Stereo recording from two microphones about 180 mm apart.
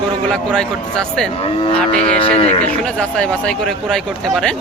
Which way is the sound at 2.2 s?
30° left (ahead or behind).